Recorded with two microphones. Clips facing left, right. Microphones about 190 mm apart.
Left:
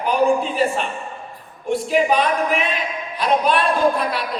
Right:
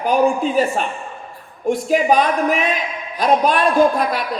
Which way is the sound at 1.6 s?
45° right (ahead or behind).